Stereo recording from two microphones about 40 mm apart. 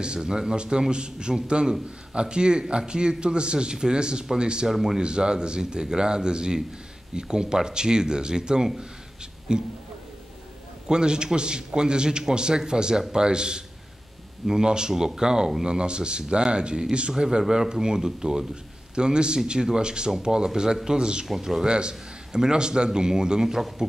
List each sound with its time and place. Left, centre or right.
0.0 s speech: right
4.6 s speech: centre
5.0 s speech: right
10.9 s speech: right
21.6 s speech: right